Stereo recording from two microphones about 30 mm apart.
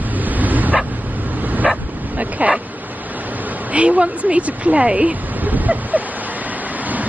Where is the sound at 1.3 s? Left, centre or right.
Right.